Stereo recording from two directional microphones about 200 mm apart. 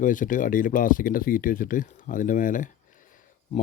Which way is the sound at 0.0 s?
40° left (ahead or behind).